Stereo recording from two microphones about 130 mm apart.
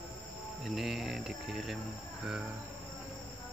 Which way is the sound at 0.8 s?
Centre (ahead or behind).